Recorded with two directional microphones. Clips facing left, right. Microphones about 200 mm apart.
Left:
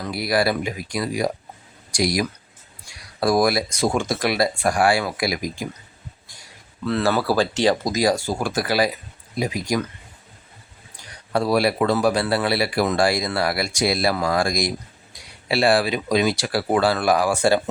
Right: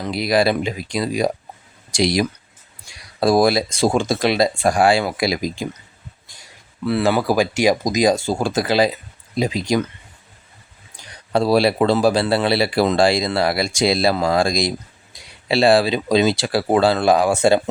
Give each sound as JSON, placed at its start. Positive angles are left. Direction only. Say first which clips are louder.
{"t": 0.0, "sound": "speech", "louder": "right 4 dB", "side_deg": -20}
{"t": 6.8, "sound": "speech", "louder": "right 3 dB", "side_deg": -10}
{"t": 11.3, "sound": "speech", "louder": "right 4 dB", "side_deg": -25}